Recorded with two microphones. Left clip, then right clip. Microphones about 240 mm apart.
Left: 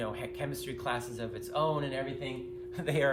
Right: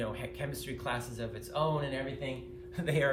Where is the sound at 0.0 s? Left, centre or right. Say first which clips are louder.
Left 1 dB; centre.